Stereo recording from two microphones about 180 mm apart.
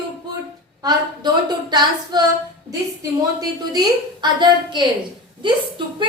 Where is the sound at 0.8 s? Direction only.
25° right (ahead or behind).